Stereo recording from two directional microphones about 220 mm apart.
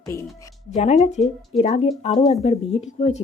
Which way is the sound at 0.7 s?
30° left (ahead or behind).